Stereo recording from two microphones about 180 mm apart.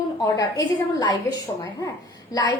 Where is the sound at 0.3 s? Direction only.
20° left (ahead or behind).